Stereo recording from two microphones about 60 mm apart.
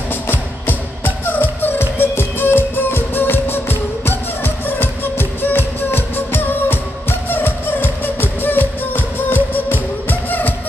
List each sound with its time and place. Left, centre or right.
0.3 s music: left